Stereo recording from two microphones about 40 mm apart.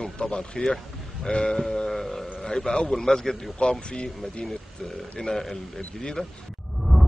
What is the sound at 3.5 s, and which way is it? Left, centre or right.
Speech, left.